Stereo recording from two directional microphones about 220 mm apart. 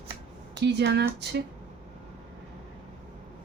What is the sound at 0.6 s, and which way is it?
Speech, 50° right (ahead or behind).